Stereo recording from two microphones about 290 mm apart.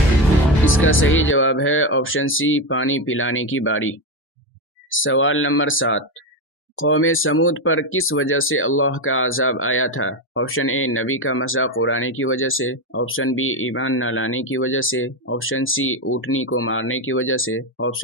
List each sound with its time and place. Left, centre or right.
0.6 s speech: left